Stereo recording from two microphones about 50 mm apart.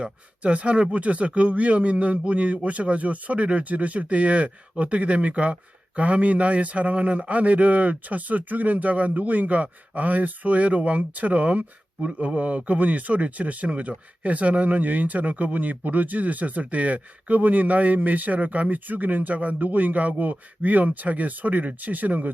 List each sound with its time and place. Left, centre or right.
0.0 s speech: right